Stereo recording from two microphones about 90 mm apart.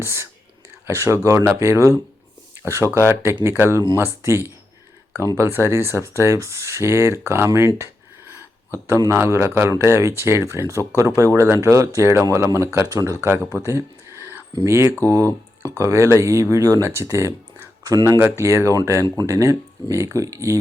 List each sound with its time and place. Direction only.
0.0 s speech: 30° right (ahead or behind)
8.2 s a sound: 20° right (ahead or behind)
9.0 s speech: 30° right (ahead or behind)
12.9 s speech: 40° right (ahead or behind)
13.5 s a sound: 35° right (ahead or behind)
14.6 s speech: 30° right (ahead or behind)